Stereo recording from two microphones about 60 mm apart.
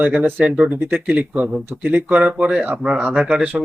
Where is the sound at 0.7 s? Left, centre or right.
Right.